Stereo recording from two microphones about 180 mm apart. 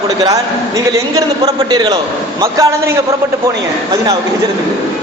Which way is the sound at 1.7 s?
20° right (ahead or behind).